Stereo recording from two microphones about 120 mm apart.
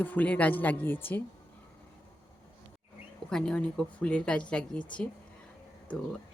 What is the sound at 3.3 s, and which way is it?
Speech, 5° left (ahead or behind).